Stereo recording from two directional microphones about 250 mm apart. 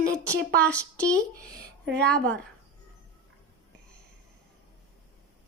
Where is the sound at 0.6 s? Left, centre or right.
Centre.